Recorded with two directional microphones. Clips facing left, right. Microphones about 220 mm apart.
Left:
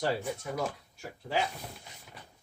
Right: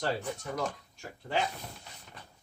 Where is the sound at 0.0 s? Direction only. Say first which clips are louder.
Left 2 dB; 10° left (ahead or behind).